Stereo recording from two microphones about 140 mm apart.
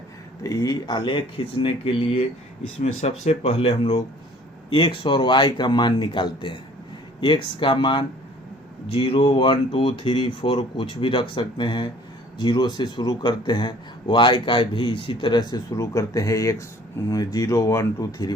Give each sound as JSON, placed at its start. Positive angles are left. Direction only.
{"t": 0.4, "sound": "a man's voice", "side_deg": 25}